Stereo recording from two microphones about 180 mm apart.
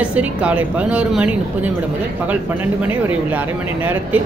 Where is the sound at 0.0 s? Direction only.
5° right (ahead or behind).